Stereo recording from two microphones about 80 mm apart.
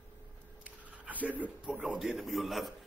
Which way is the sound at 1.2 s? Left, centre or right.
Centre.